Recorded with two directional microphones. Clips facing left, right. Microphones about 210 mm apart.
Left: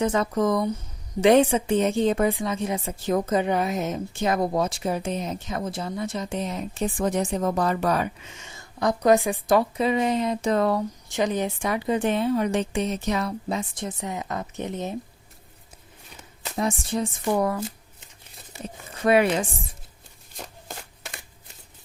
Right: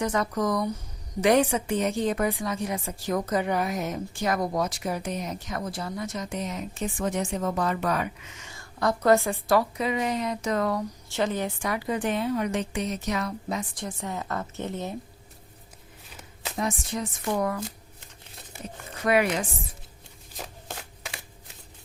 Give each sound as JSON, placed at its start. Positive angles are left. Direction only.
{"t": 0.0, "sound": "a woman's voice", "side_deg": 25}
{"t": 11.1, "sound": "a woman's voice", "side_deg": 15}
{"t": 16.6, "sound": "speech", "side_deg": 30}
{"t": 19.0, "sound": "a woman's voice", "side_deg": 30}
{"t": 20.3, "sound": "shuffling cards", "side_deg": 0}